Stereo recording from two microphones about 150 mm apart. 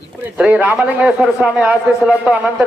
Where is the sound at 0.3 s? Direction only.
10° right (ahead or behind).